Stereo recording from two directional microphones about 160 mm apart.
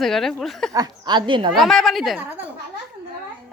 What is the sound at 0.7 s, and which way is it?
Speech, 25° right (ahead or behind).